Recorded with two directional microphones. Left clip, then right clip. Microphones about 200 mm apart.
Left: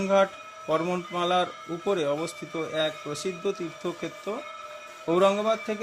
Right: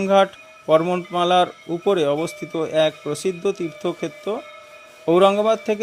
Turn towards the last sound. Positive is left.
turn(degrees=-25)  # may be behind; listen again after turning